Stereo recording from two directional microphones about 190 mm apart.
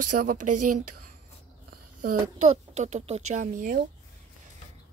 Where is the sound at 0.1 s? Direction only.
45° right (ahead or behind).